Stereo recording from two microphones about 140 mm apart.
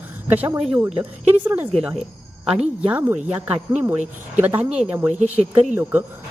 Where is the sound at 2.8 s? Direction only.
15° right (ahead or behind).